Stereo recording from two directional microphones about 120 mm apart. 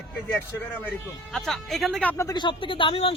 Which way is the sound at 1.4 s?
5° left (ahead or behind).